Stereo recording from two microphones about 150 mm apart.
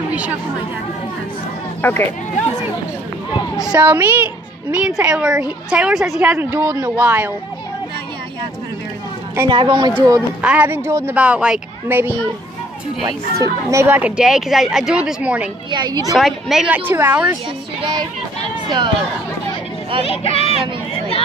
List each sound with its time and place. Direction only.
0.1 s speech: 10° right (ahead or behind)
1.8 s speech: 15° left (ahead or behind)
3.5 s a child's voice: 5° right (ahead or behind)
6.3 s speech: 15° right (ahead or behind)
9.5 s speech: 35° right (ahead or behind)
9.9 s a woman's voice: 20° right (ahead or behind)
10.4 s speech: 10° right (ahead or behind)
15.7 s a woman's voice: 30° right (ahead or behind)
16.1 s speech: centre (ahead or behind)
20.1 s speech: 40° left (ahead or behind)